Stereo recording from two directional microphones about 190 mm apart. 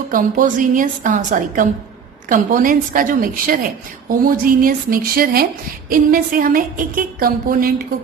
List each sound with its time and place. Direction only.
0.1 s a woman's voice: 45° right (ahead or behind)